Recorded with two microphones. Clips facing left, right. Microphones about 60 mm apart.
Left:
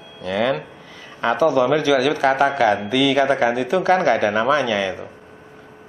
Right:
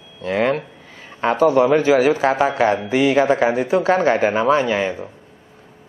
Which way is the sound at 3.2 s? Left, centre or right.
Centre.